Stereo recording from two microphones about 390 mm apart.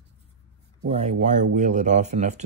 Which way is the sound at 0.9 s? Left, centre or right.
Centre.